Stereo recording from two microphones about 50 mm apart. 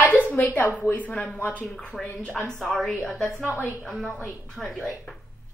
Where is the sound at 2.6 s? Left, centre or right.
Centre.